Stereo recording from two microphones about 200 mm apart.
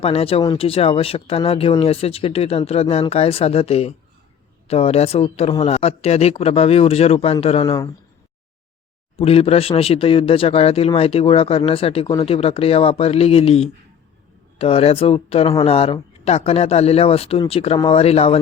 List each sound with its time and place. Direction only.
0.0 s speech: 30° left (ahead or behind)
9.1 s speech: 30° left (ahead or behind)